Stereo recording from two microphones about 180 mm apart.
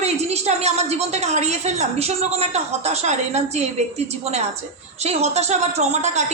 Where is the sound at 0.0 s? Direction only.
35° right (ahead or behind).